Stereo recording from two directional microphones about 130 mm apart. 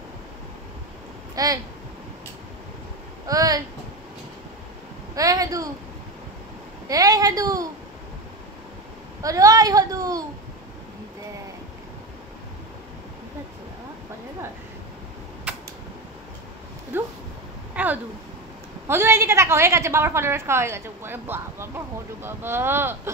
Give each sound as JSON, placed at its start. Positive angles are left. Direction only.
{"t": 1.3, "sound": "speech", "side_deg": -30}
{"t": 3.3, "sound": "a woman's voice", "side_deg": -25}
{"t": 5.1, "sound": "a woman's voice", "side_deg": -25}
{"t": 6.9, "sound": "a woman's voice", "side_deg": -30}
{"t": 9.2, "sound": "a woman's voice", "side_deg": -25}
{"t": 15.5, "sound": "a sound", "side_deg": -10}
{"t": 16.9, "sound": "dog", "side_deg": -15}
{"t": 17.7, "sound": "a woman's voice", "side_deg": -15}